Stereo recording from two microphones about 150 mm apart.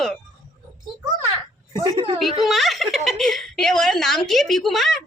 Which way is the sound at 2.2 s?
Centre (ahead or behind).